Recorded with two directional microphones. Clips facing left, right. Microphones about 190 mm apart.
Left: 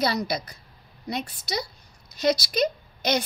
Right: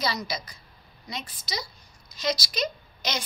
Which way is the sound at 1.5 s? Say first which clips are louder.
Left 5 dB; 60° left (ahead or behind).